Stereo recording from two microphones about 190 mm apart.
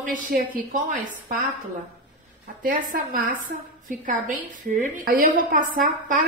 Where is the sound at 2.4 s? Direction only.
45° right (ahead or behind).